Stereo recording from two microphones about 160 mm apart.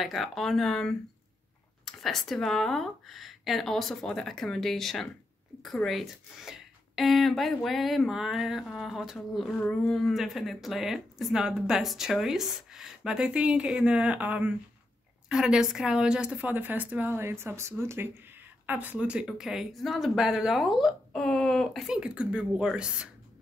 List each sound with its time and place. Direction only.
0.0 s a woman's voice: centre (ahead or behind)